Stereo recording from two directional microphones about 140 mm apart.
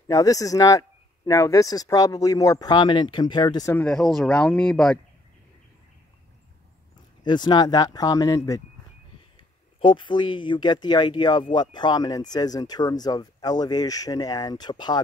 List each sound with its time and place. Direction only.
0.1 s speech: 25° left (ahead or behind)
3.7 s speech: 5° left (ahead or behind)
7.2 s speech: 30° left (ahead or behind)
9.8 s speech: 35° left (ahead or behind)